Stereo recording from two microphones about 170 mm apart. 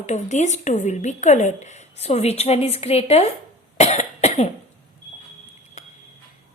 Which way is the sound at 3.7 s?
40° left (ahead or behind).